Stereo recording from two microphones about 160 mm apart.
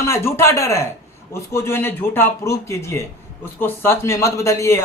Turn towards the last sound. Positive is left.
turn(degrees=20)  # may be behind; listen again after turning